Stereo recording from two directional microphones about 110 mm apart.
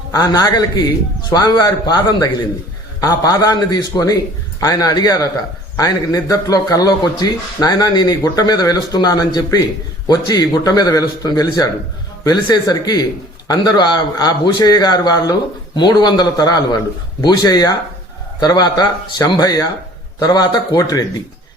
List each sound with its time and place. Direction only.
0.1 s a man's voice: 35° left (ahead or behind)